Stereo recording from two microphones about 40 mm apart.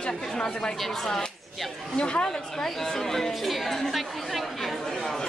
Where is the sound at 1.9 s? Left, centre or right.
Left.